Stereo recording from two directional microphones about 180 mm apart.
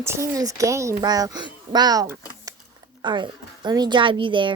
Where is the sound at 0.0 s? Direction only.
15° right (ahead or behind).